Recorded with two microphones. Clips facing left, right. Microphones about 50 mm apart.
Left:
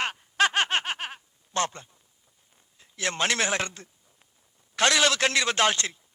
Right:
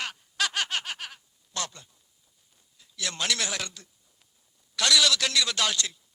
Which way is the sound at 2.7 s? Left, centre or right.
Left.